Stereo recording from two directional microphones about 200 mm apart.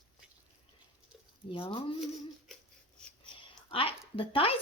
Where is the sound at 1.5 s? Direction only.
25° left (ahead or behind).